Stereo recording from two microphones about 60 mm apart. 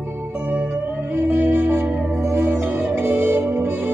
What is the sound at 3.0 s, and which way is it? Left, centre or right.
Music, right.